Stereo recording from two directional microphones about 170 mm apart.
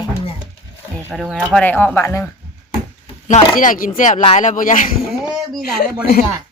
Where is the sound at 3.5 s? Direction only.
55° left (ahead or behind).